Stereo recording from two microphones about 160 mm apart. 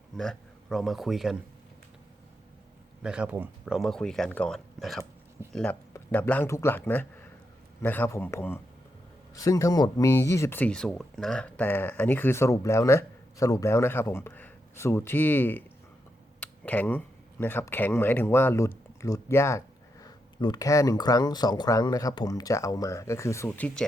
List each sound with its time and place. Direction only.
0.2 s speech: centre (ahead or behind)
3.0 s speech: 5° right (ahead or behind)
5.4 s speech: 15° right (ahead or behind)
5.9 s speech: 10° left (ahead or behind)
16.4 s a sound: 10° left (ahead or behind)
17.4 s speech: 15° left (ahead or behind)